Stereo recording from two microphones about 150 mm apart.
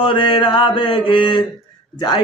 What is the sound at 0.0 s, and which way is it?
Speech, 35° left (ahead or behind).